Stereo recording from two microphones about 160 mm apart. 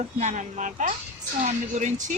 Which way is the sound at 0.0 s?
50° right (ahead or behind).